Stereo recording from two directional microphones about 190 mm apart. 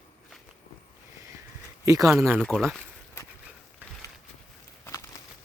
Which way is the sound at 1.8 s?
15° right (ahead or behind).